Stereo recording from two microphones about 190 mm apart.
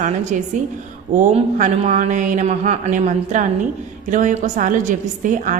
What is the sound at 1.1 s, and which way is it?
A woman's voice, 40° right (ahead or behind).